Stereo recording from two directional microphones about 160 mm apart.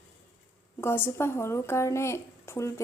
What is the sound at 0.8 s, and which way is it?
A woman's voice, 15° left (ahead or behind).